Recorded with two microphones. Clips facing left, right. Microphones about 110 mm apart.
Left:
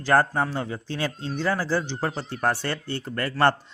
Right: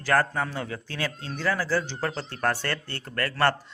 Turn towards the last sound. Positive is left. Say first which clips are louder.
# left 3 dB
turn(degrees=20)  # may be behind; listen again after turning